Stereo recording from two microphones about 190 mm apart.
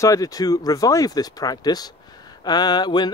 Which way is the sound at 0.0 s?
20° left (ahead or behind).